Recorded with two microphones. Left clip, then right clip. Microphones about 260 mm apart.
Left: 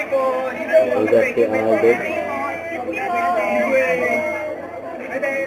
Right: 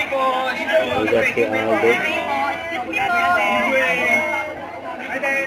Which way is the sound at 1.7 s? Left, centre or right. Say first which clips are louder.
Left 1 dB; centre.